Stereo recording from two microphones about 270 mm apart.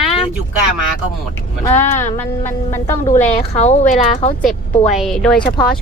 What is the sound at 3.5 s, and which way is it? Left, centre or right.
Speech, left.